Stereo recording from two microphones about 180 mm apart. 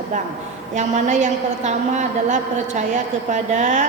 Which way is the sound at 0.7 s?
40° right (ahead or behind).